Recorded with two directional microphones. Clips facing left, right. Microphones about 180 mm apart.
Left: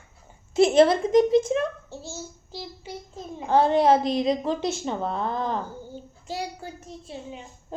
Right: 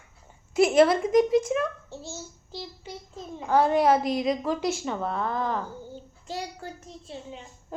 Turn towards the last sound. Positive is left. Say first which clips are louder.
# left 2 dB
turn(degrees=10)  # may be behind; listen again after turning